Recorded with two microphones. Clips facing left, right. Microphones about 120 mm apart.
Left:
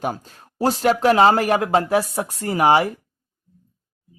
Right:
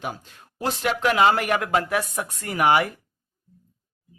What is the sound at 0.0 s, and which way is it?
Speech, 40° left (ahead or behind).